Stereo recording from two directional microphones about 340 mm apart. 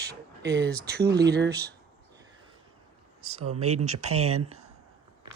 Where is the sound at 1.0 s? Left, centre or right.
Centre.